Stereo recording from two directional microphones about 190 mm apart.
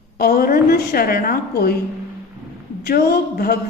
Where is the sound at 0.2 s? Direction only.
50° left (ahead or behind).